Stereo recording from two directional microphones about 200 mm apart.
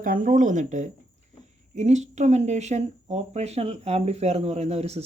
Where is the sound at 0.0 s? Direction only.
45° right (ahead or behind).